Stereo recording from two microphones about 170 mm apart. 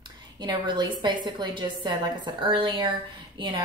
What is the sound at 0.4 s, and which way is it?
Speech, 25° right (ahead or behind).